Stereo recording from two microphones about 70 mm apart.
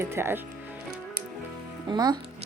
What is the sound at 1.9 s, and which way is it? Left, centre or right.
Speech, right.